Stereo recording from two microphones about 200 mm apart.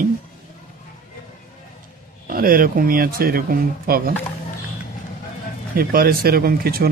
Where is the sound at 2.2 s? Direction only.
45° right (ahead or behind).